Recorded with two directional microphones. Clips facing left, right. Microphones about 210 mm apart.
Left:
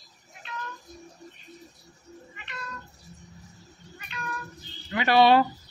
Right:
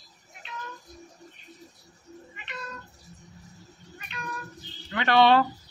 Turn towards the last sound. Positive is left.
turn(degrees=10)  # may be behind; listen again after turning